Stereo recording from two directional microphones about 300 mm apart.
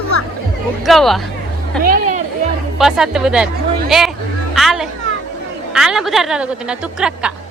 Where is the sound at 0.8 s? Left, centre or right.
Centre.